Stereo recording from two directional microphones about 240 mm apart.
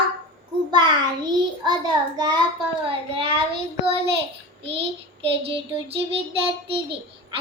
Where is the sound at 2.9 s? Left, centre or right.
Right.